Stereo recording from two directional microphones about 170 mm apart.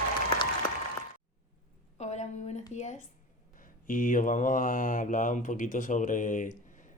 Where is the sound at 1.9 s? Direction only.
40° left (ahead or behind).